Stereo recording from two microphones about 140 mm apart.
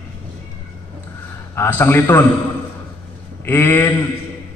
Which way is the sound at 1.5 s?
15° left (ahead or behind).